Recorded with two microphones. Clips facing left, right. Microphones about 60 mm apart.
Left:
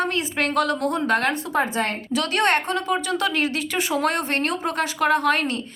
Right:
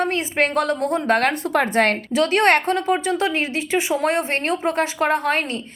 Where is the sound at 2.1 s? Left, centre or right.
Right.